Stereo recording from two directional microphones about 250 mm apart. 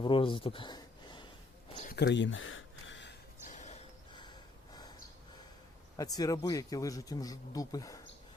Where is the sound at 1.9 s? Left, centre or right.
Left.